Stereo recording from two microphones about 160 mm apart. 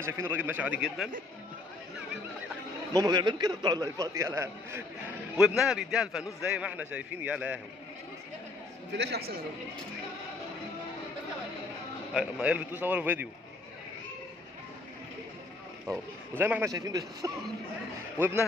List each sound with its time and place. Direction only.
0.0 s a man's voice: 15° right (ahead or behind)
2.9 s a man's voice: 25° right (ahead or behind)
5.4 s a man's voice: centre (ahead or behind)
8.9 s a man's voice: 90° right
12.1 s a man's voice: 5° right (ahead or behind)
16.3 s a man's voice: 15° right (ahead or behind)